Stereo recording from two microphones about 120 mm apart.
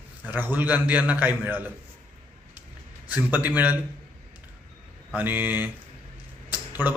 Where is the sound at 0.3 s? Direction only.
15° right (ahead or behind).